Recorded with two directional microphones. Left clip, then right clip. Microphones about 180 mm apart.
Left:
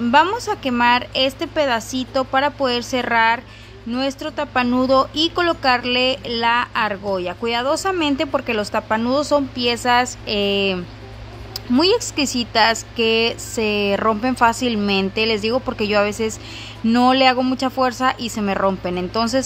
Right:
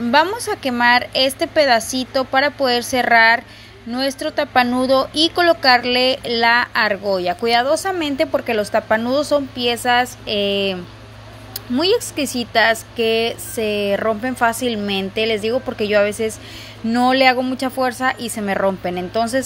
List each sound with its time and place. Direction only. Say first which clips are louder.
0.1 s speech: even; centre (ahead or behind)
11.8 s speech: even; centre (ahead or behind)